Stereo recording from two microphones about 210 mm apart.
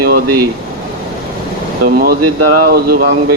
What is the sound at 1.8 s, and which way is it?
Speech, 45° right (ahead or behind).